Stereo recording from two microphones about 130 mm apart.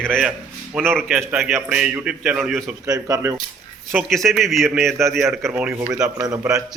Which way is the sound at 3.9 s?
Centre (ahead or behind).